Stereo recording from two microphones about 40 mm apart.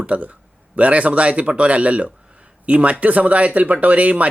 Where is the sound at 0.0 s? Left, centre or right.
Right.